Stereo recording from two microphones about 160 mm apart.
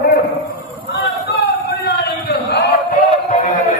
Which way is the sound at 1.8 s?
90° left.